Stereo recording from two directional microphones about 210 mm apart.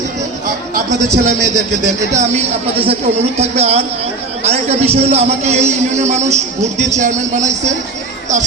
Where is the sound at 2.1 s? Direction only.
30° right (ahead or behind).